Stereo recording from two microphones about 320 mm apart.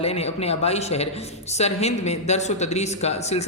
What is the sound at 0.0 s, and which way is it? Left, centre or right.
Speech, centre.